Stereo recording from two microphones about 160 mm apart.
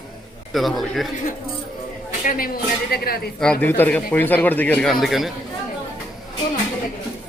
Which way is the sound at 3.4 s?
10° left (ahead or behind).